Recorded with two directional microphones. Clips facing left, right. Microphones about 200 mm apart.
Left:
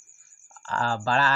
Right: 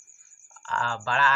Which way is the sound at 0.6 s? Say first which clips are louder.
Left 4 dB; 35° left (ahead or behind).